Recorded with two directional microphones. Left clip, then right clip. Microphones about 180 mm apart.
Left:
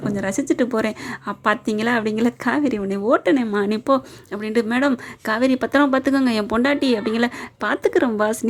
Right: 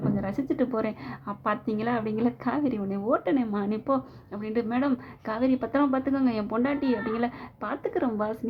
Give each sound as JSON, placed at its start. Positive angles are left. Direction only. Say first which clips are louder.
{"t": 0.2, "sound": "a woman's voice", "louder": "left 12 dB", "side_deg": 30}